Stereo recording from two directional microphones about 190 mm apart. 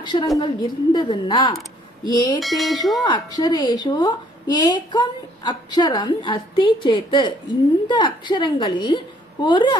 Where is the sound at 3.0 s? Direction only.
20° left (ahead or behind).